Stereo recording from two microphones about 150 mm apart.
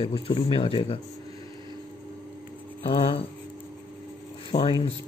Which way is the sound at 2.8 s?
40° left (ahead or behind).